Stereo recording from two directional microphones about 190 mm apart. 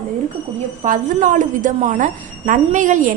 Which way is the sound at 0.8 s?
45° right (ahead or behind).